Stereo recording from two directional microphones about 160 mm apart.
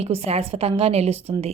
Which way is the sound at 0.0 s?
40° right (ahead or behind).